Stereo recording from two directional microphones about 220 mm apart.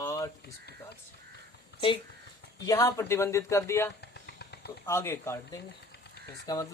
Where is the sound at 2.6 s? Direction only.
15° left (ahead or behind).